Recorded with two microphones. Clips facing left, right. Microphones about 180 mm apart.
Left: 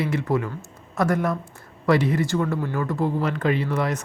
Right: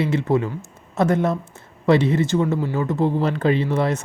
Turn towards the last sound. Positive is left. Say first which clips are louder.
# right 4 dB
turn(degrees=-30)  # may be behind; listen again after turning